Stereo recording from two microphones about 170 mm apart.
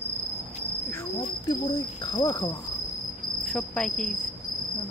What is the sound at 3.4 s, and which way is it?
Cricket, 5° left (ahead or behind).